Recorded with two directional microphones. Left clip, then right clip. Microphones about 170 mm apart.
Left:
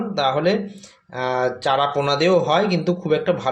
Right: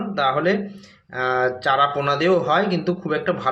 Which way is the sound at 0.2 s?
20° left (ahead or behind).